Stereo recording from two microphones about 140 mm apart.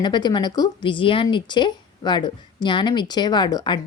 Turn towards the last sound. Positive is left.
turn(degrees=30)  # may be behind; listen again after turning